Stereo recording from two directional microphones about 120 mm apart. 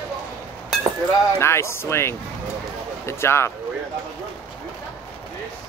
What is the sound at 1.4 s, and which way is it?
Speech, 20° left (ahead or behind).